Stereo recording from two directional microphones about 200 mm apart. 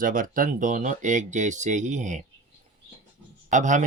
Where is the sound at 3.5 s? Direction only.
40° right (ahead or behind).